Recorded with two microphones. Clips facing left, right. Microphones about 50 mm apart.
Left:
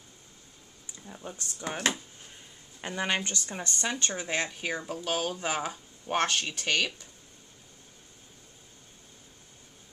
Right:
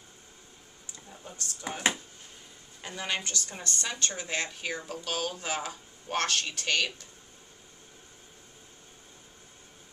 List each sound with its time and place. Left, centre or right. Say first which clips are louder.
0.9 s a sound: left 5 dB; centre
1.6 s speech: left 2 dB; centre
2.8 s speech: left 4 dB; left; by 6.9 s centre